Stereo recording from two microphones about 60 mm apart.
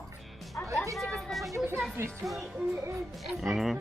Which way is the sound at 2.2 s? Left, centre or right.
Centre.